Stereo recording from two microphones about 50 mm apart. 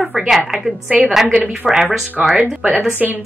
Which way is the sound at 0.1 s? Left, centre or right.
Centre.